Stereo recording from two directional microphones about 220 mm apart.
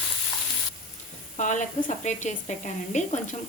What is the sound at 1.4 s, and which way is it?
Speech, 35° left (ahead or behind).